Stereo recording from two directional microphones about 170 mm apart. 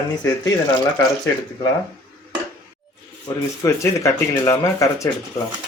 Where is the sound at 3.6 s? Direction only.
15° left (ahead or behind).